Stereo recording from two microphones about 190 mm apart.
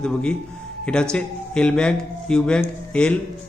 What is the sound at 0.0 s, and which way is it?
Speech, 5° left (ahead or behind).